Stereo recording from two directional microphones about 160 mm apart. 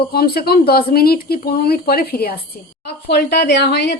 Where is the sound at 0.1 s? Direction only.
70° left (ahead or behind).